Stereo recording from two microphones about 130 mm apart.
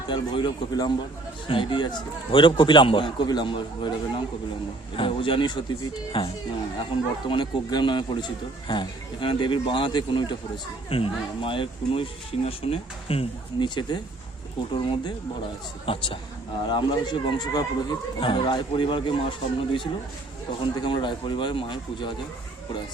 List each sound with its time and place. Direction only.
0.1 s speech: 35° left (ahead or behind)
13.7 s speech: 35° left (ahead or behind)
18.2 s speech: 40° left (ahead or behind)